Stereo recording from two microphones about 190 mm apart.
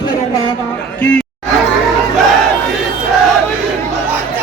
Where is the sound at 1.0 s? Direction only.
10° left (ahead or behind).